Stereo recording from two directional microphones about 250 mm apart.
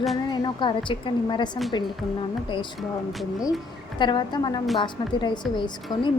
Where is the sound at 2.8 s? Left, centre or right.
Centre.